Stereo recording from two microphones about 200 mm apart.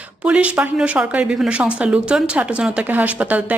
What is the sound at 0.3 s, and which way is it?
Speech, 5° right (ahead or behind).